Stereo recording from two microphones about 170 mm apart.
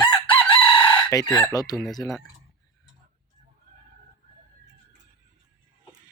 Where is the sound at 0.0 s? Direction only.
10° left (ahead or behind).